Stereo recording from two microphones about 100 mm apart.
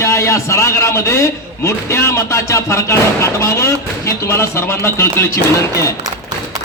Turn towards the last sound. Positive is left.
turn(degrees=30)  # may be behind; listen again after turning